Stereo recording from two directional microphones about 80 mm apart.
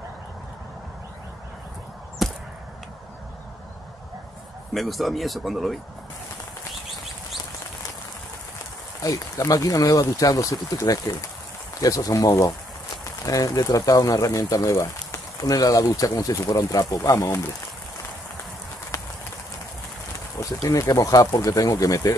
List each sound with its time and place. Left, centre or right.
2.2 s a sound: centre
4.7 s speech: centre
9.0 s speech: left
20.3 s speech: left